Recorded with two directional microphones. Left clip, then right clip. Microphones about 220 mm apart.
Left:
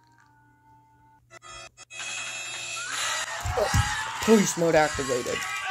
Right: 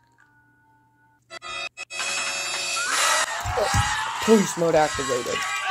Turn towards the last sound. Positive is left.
turn(degrees=-55)  # may be behind; listen again after turning